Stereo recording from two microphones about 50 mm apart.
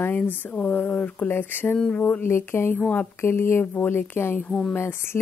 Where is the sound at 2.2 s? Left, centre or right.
Left.